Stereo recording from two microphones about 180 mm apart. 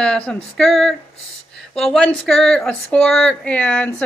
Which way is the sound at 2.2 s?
5° left (ahead or behind).